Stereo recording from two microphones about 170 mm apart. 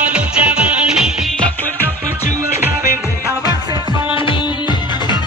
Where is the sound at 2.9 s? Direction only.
15° right (ahead or behind).